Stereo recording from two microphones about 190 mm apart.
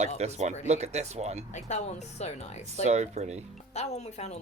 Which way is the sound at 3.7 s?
35° left (ahead or behind).